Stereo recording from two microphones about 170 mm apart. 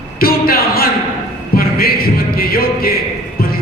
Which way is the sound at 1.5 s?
60° left (ahead or behind).